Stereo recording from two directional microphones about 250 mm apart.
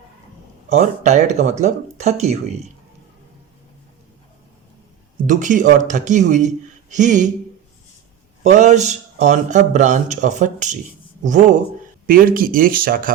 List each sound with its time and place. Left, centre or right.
0.7 s speech: right
5.2 s speech: right
8.4 s speech: right